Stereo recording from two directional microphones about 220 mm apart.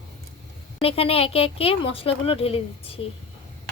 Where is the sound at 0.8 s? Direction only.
25° left (ahead or behind).